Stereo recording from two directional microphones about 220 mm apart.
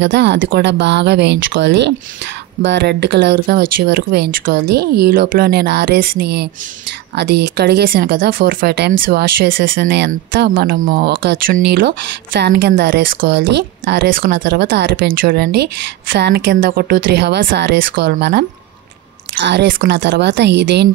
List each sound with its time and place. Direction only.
0.0 s speech: 55° right (ahead or behind)